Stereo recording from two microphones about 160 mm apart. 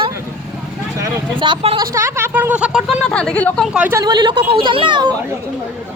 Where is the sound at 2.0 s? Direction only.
15° right (ahead or behind).